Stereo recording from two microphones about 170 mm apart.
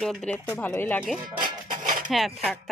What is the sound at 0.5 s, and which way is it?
Speech, 15° left (ahead or behind).